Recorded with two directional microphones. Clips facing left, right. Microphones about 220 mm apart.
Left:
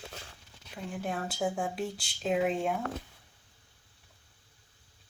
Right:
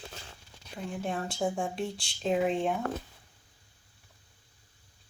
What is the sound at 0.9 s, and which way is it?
Speech, 5° left (ahead or behind).